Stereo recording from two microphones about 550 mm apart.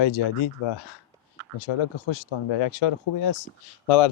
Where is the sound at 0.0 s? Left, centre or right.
Left.